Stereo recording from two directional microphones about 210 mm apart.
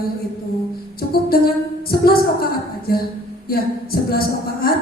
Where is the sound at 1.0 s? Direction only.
45° left (ahead or behind).